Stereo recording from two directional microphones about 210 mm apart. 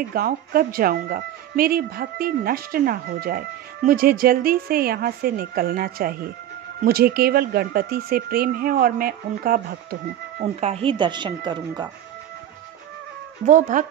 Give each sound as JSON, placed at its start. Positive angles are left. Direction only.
{"t": 0.1, "sound": "speech", "side_deg": -45}
{"t": 10.4, "sound": "speech", "side_deg": -30}
{"t": 13.5, "sound": "speech", "side_deg": -35}